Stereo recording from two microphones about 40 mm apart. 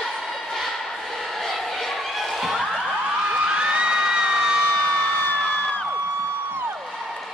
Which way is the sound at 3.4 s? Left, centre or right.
Right.